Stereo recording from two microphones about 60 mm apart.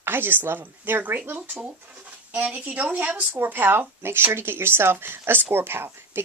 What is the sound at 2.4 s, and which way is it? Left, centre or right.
Speech, right.